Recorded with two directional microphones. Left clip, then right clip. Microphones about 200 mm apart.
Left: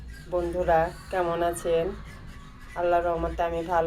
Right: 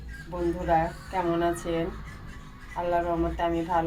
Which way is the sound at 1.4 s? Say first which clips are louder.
Left 2 dB; 25° left (ahead or behind).